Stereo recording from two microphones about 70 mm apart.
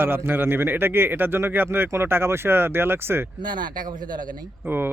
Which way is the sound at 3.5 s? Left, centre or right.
Right.